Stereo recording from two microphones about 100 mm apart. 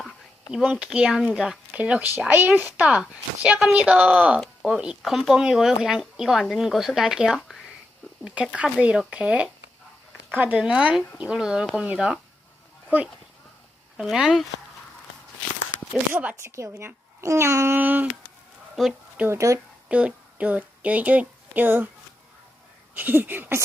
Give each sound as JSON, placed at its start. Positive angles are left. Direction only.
{"t": 0.5, "sound": "speech", "side_deg": -10}
{"t": 8.5, "sound": "speech", "side_deg": -10}
{"t": 13.9, "sound": "speech", "side_deg": -5}
{"t": 16.1, "sound": "speech", "side_deg": -25}
{"t": 17.7, "sound": "speech", "side_deg": -15}
{"t": 18.8, "sound": "a sound", "side_deg": -5}
{"t": 19.2, "sound": "speech", "side_deg": -30}
{"t": 19.9, "sound": "a woman's voice", "side_deg": -15}
{"t": 23.0, "sound": "speech", "side_deg": -20}